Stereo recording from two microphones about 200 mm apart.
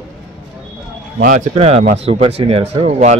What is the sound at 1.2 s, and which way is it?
Speech, 35° right (ahead or behind).